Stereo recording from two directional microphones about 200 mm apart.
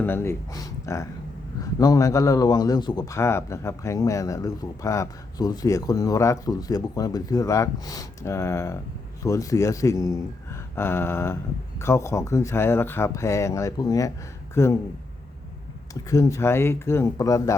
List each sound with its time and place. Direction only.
0.0 s speech: 10° left (ahead or behind)
16.0 s speech: 15° left (ahead or behind)